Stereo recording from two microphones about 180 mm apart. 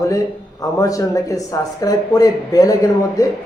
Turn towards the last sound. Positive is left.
turn(degrees=20)  # may be behind; listen again after turning